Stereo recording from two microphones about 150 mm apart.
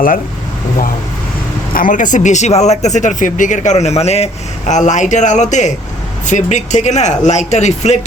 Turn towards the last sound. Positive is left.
turn(degrees=50)  # may be behind; listen again after turning